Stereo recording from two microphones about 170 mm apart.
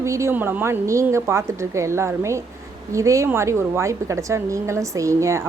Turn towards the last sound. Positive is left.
turn(degrees=-20)  # may be behind; listen again after turning